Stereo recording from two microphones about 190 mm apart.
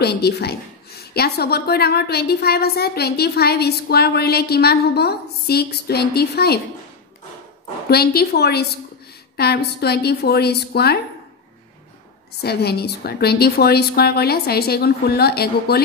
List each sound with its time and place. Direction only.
0.0 s a woman's voice: 60° left (ahead or behind)
7.9 s a woman's voice: 55° left (ahead or behind)
12.4 s a woman's voice: 60° left (ahead or behind)